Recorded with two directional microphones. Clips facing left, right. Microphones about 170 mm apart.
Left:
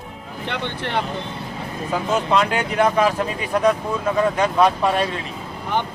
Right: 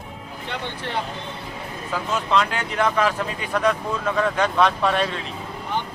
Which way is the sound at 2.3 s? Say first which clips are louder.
Left 3 dB; 15° left (ahead or behind).